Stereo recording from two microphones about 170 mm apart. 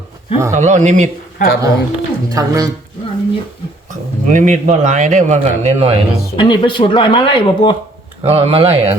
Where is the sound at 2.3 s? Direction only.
20° right (ahead or behind).